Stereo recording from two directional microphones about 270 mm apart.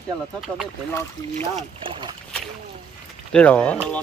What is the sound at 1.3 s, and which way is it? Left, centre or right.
Speech, right.